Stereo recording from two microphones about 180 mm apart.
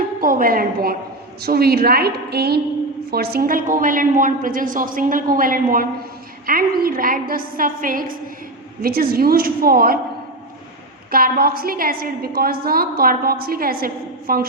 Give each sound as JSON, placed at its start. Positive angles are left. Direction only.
{"t": 0.2, "sound": "a woman's voice", "side_deg": -50}
{"t": 11.1, "sound": "a woman's voice", "side_deg": -55}